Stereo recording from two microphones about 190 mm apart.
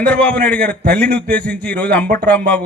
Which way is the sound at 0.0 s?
5° left (ahead or behind).